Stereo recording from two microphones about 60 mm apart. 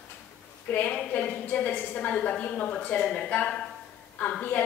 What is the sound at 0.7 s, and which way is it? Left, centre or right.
A woman's voice, left.